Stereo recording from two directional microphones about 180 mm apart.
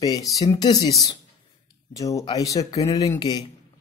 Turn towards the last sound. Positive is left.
turn(degrees=25)  # may be behind; listen again after turning